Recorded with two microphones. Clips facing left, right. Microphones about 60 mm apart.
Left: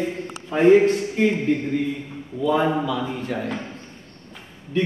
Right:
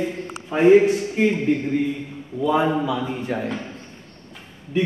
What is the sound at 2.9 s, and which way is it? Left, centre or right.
Speech, centre.